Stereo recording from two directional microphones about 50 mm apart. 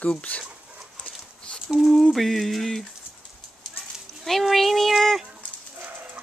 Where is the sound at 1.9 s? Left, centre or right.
Centre.